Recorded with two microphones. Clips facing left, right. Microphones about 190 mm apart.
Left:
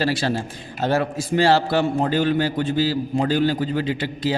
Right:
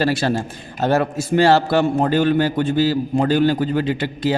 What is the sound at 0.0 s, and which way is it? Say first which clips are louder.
A man's voice: right 3 dB; 55° right (ahead or behind).